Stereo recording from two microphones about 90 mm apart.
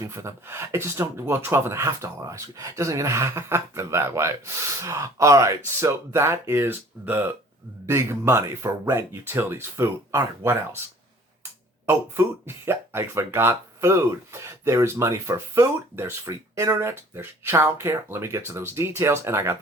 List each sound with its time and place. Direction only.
0.0 s speech: 35° right (ahead or behind)
11.9 s speech: 25° right (ahead or behind)